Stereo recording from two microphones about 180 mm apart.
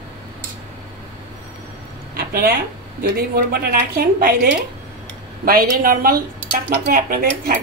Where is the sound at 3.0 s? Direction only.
55° right (ahead or behind).